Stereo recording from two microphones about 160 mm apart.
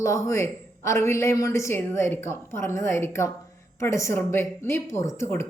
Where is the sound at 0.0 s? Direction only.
20° left (ahead or behind).